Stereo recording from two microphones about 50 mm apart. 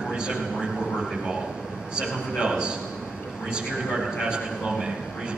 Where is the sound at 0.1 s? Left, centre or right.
Centre.